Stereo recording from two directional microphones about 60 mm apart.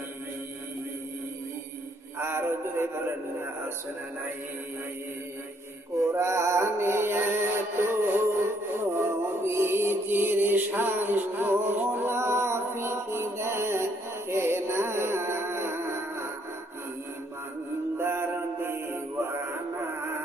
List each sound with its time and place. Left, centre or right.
2.1 s a sound: right
6.1 s music: right
17.9 s music: right